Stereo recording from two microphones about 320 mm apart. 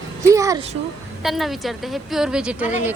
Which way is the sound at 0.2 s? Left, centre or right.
Centre.